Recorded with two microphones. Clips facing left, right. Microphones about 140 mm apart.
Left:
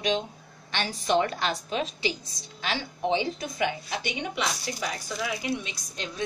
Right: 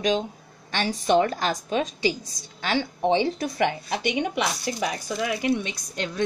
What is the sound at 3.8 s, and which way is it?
Speech, 45° right (ahead or behind).